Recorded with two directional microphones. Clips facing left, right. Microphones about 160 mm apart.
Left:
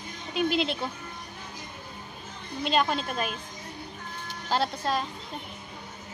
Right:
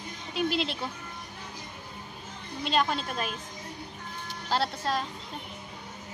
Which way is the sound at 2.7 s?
5° left (ahead or behind).